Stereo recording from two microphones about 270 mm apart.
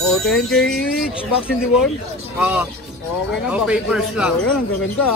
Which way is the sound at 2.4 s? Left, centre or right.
Centre.